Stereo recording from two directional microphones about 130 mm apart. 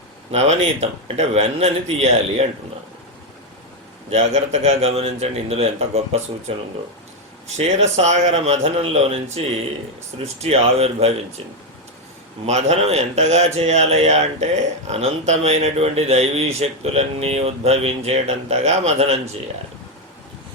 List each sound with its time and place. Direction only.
0.3 s speech: 55° right (ahead or behind)
4.6 s speech: 50° right (ahead or behind)
7.4 s speech: 60° right (ahead or behind)
10.4 s speech: 50° right (ahead or behind)
12.5 s speech: 60° right (ahead or behind)